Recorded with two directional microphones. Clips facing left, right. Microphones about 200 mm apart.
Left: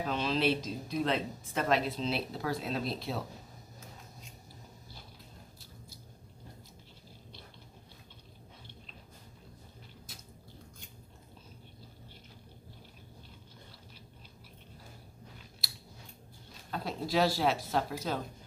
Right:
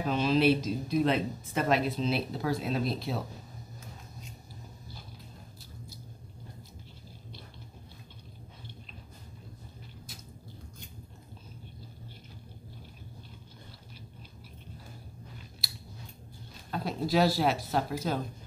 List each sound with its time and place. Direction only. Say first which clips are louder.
0.0 s speech: right 5 dB; 10° right (ahead or behind)
16.7 s speech: right 3 dB; 5° right (ahead or behind)